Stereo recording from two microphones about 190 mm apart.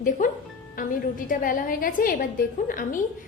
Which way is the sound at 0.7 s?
45° left (ahead or behind).